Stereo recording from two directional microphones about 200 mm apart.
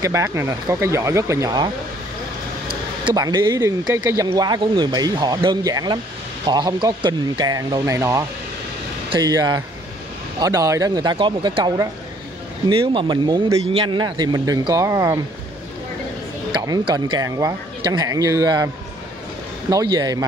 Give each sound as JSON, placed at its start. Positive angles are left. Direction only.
{"t": 0.0, "sound": "speech", "side_deg": -15}
{"t": 3.1, "sound": "speech", "side_deg": -20}
{"t": 16.5, "sound": "speech", "side_deg": -20}
{"t": 19.7, "sound": "speech", "side_deg": -20}